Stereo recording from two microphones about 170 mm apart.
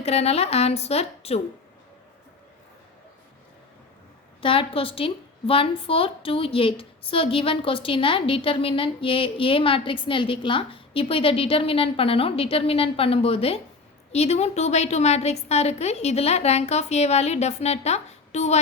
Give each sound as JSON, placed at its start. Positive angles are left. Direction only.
{"t": 0.0, "sound": "a woman's voice", "side_deg": 40}
{"t": 4.4, "sound": "a woman's voice", "side_deg": 30}